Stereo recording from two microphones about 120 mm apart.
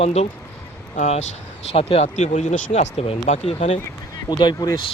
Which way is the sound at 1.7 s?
55° left (ahead or behind).